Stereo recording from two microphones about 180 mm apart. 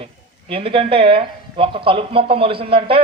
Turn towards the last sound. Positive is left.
turn(degrees=-30)  # may be behind; listen again after turning